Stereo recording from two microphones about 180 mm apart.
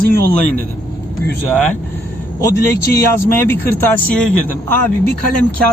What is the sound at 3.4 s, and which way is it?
Speech, 10° left (ahead or behind).